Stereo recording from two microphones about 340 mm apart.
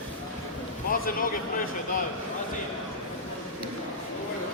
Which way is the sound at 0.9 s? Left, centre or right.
Left.